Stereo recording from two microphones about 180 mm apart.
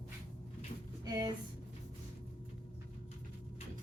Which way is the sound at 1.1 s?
20° right (ahead or behind).